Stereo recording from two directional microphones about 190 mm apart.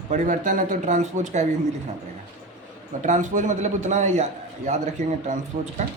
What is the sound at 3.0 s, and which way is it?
A man's voice, 40° right (ahead or behind).